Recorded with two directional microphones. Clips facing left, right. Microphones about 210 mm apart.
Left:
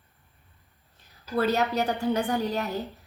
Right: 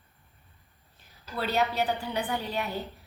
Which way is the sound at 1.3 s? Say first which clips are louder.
Left 4 dB; 45° left (ahead or behind).